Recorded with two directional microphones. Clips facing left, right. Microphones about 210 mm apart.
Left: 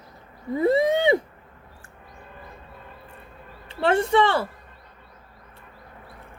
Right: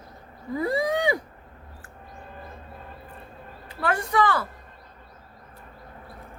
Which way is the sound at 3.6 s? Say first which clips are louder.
Left 6 dB; 25° left (ahead or behind).